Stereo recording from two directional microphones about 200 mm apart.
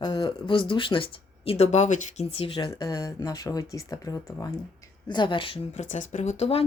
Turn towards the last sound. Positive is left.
turn(degrees=30)  # may be behind; listen again after turning